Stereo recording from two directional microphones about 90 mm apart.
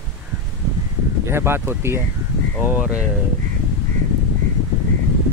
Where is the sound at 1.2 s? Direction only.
30° right (ahead or behind).